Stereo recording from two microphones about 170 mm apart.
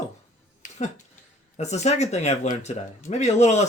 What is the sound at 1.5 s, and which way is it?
Speech, 40° left (ahead or behind).